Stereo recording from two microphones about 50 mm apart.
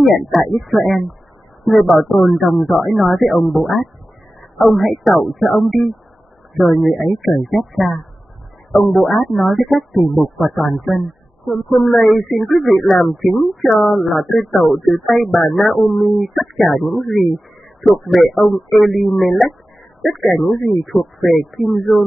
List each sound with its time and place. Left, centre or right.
0.3 s speech: centre